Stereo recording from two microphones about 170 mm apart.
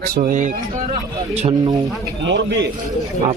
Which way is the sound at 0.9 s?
35° right (ahead or behind).